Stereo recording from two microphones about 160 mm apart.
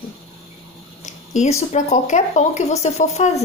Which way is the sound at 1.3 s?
45° left (ahead or behind).